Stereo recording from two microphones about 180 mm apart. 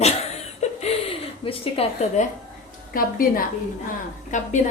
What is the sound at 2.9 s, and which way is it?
A woman's voice, 55° left (ahead or behind).